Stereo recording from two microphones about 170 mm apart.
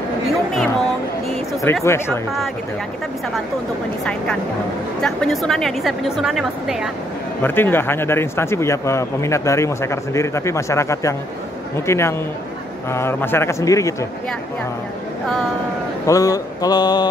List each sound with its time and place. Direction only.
1.6 s a man's voice: 15° left (ahead or behind)
5.0 s a woman's voice: centre (ahead or behind)
7.4 s a man's voice: 10° left (ahead or behind)
16.1 s speech: 20° left (ahead or behind)